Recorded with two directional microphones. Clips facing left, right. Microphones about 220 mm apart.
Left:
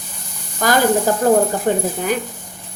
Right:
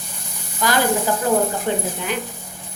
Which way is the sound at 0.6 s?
50° left (ahead or behind).